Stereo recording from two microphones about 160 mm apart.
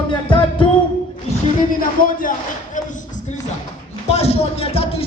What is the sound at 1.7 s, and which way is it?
Speech, 60° left (ahead or behind).